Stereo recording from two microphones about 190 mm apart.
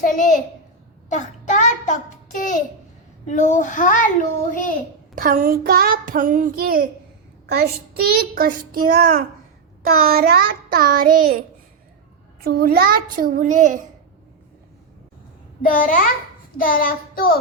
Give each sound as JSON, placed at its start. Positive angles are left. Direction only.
{"t": 0.0, "sound": "a child's voice", "side_deg": 45}
{"t": 1.1, "sound": "child singing", "side_deg": 40}
{"t": 3.2, "sound": "a child's voice", "side_deg": 40}
{"t": 5.1, "sound": "a child's voice", "side_deg": -45}
{"t": 12.4, "sound": "a child's voice", "side_deg": -50}
{"t": 15.6, "sound": "a child's voice", "side_deg": 45}